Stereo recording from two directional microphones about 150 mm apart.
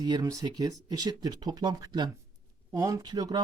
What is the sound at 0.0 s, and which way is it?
Speech, 25° right (ahead or behind).